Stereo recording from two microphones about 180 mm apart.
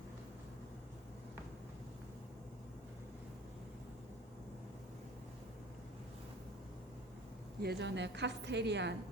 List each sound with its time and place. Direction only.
7.6 s a woman's voice: 65° right (ahead or behind)